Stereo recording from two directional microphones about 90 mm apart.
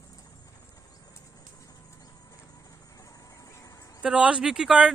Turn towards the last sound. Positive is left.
turn(degrees=-5)  # may be behind; listen again after turning